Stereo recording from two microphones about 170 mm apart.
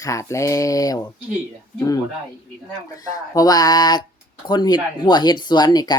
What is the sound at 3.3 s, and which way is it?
Speech, 20° left (ahead or behind).